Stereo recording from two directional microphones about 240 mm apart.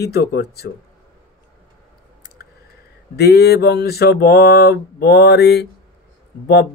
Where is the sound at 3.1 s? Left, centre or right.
Left.